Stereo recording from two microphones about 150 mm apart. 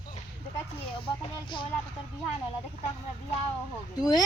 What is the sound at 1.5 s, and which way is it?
Speech, 35° left (ahead or behind).